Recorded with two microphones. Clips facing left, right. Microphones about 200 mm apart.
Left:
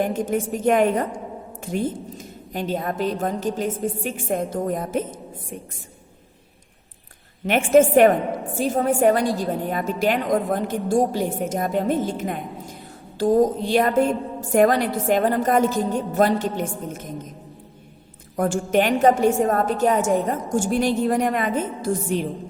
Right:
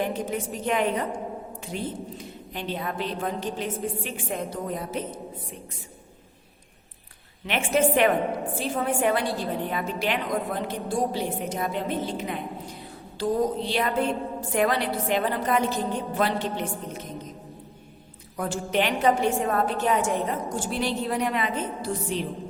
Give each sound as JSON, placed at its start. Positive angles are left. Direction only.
{"t": 0.0, "sound": "a woman's voice", "side_deg": 45}
{"t": 7.4, "sound": "a woman's voice", "side_deg": 45}
{"t": 18.3, "sound": "a woman's voice", "side_deg": 50}